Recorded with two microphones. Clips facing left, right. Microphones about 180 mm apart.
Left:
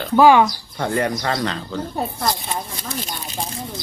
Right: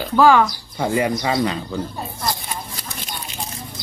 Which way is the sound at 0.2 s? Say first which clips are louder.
Left 1 dB; 15° left (ahead or behind).